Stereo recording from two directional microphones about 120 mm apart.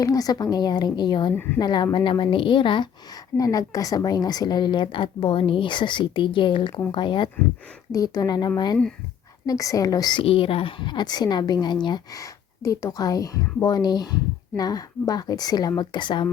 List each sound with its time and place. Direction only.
0.0 s a woman's voice: 30° left (ahead or behind)
3.3 s a woman's voice: 30° left (ahead or behind)
7.9 s a woman's voice: 30° left (ahead or behind)
10.2 s a woman's voice: 50° left (ahead or behind)